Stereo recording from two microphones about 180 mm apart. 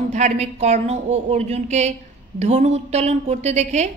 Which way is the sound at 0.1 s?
40° right (ahead or behind).